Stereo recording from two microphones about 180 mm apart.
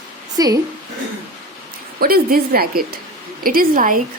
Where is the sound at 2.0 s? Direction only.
55° right (ahead or behind).